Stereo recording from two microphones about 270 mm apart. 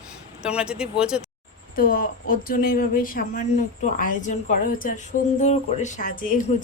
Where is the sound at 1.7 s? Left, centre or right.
Left.